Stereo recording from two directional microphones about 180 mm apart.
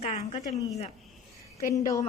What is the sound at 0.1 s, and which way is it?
Speech, 35° left (ahead or behind).